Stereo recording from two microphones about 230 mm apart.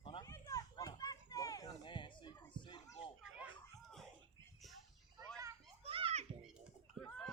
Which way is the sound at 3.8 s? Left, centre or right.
Centre.